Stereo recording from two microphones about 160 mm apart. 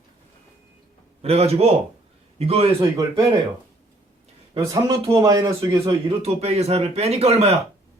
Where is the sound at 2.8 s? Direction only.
20° right (ahead or behind).